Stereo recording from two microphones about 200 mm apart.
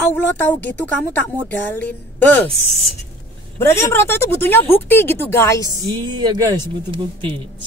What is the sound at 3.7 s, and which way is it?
A woman's voice, 15° left (ahead or behind).